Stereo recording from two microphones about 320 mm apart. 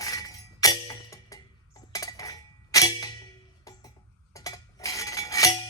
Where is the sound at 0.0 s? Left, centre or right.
Centre.